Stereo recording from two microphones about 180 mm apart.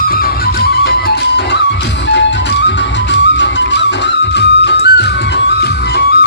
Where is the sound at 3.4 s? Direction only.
80° left.